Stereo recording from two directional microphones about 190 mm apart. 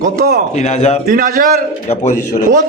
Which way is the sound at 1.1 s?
50° right (ahead or behind).